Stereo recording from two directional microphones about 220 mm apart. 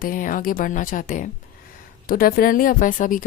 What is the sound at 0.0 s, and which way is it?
A woman's voice, 40° left (ahead or behind).